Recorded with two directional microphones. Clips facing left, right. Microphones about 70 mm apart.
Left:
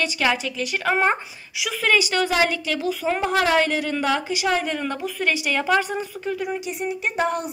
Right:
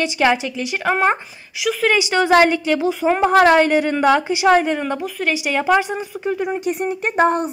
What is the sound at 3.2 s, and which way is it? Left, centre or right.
A woman's voice, right.